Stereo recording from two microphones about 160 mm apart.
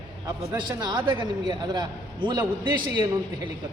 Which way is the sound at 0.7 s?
25° right (ahead or behind).